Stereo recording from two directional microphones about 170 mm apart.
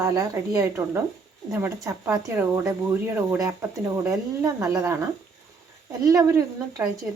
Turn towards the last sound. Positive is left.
turn(degrees=-20)  # may be behind; listen again after turning